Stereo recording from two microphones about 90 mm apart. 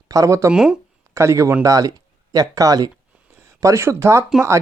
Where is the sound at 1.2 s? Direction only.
35° right (ahead or behind).